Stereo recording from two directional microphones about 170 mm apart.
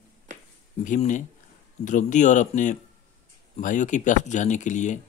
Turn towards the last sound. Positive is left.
turn(degrees=45)  # may be behind; listen again after turning